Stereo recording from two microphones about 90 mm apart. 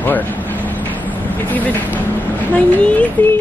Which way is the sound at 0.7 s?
20° left (ahead or behind).